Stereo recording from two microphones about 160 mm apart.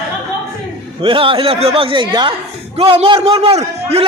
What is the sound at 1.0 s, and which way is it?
A man's voice, 35° right (ahead or behind).